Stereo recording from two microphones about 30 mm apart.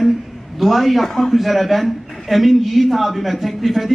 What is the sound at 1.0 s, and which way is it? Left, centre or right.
Speech, centre.